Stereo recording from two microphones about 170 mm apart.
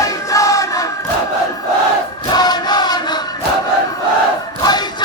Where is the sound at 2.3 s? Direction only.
25° left (ahead or behind).